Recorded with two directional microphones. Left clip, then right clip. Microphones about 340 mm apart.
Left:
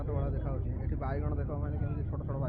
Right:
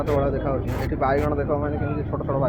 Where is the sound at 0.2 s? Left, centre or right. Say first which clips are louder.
Right 16 dB; centre.